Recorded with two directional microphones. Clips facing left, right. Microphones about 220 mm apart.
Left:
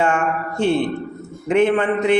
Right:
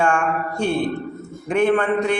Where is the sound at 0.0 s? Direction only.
20° left (ahead or behind).